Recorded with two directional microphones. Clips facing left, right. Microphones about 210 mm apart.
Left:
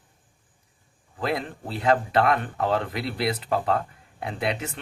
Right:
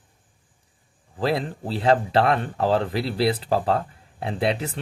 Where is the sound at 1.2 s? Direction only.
30° right (ahead or behind).